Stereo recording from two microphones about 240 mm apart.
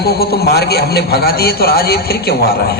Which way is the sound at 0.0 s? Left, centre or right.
Left.